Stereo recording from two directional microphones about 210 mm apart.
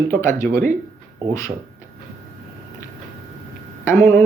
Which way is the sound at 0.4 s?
40° right (ahead or behind).